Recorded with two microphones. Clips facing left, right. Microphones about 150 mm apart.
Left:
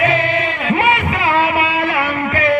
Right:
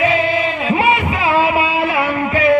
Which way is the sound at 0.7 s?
15° right (ahead or behind).